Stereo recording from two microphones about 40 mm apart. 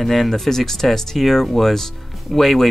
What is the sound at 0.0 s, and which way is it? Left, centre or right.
Speech, centre.